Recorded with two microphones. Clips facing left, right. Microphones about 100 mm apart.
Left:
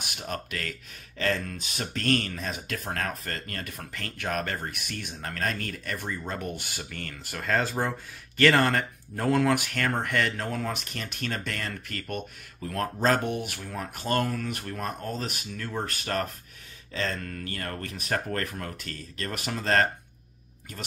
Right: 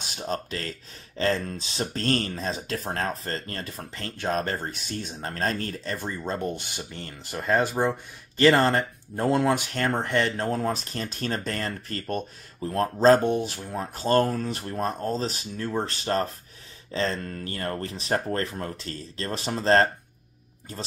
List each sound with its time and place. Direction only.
0.0 s speech: 30° right (ahead or behind)